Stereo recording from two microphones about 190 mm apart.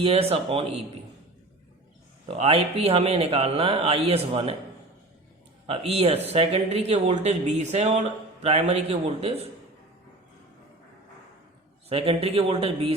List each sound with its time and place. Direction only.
0.0 s speech: 30° right (ahead or behind)
2.2 s speech: 35° right (ahead or behind)
5.6 s speech: 30° right (ahead or behind)
11.9 s speech: 30° right (ahead or behind)